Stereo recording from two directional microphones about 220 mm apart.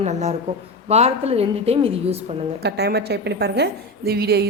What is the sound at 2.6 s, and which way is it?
A woman's voice, 50° right (ahead or behind).